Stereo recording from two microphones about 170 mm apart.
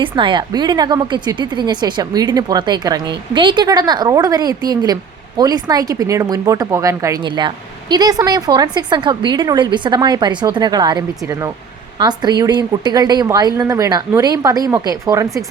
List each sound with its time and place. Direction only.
0.0 s speech: 30° right (ahead or behind)